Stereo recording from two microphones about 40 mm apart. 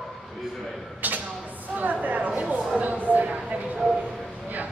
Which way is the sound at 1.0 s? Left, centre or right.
Right.